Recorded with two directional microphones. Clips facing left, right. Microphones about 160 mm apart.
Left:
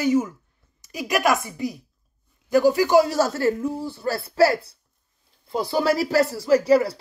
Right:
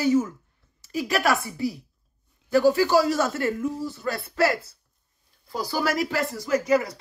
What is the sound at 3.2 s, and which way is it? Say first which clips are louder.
A man's voice: left 4 dB; 35° left (ahead or behind).